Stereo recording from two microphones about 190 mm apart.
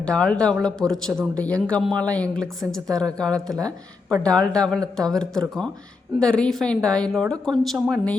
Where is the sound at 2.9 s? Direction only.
20° right (ahead or behind).